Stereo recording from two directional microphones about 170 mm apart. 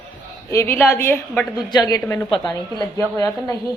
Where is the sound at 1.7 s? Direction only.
20° left (ahead or behind).